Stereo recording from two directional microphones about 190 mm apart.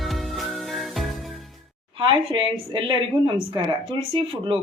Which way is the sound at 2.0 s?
25° right (ahead or behind).